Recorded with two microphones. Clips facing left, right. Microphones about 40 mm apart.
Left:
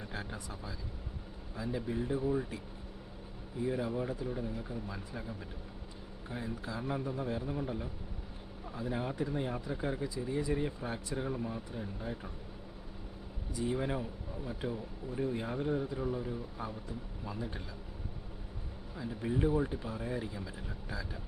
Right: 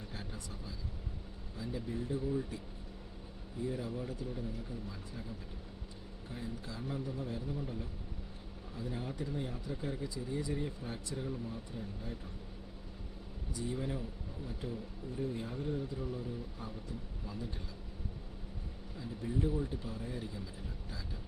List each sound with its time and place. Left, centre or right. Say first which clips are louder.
1.7 s speech: left 4 dB; left
3.6 s speech: left 5 dB; left
6.3 s speech: left 4 dB; left
13.7 s speech: left 5 dB; left
14.7 s speech: left 3 dB; left
18.9 s speech: left 3 dB; left